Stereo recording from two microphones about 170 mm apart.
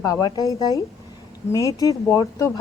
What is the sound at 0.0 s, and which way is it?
Speech, 20° left (ahead or behind).